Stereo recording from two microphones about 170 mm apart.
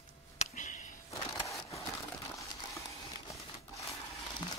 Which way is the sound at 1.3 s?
20° left (ahead or behind).